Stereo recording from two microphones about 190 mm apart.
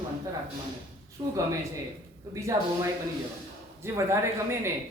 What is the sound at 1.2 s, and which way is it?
Speech, 20° right (ahead or behind).